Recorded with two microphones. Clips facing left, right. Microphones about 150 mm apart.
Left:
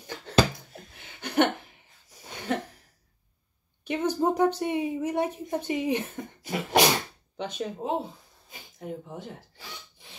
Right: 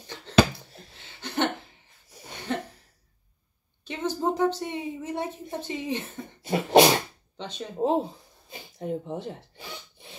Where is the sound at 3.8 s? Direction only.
15° left (ahead or behind).